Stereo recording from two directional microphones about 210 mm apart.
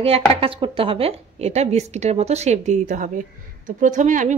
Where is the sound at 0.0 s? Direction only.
25° right (ahead or behind).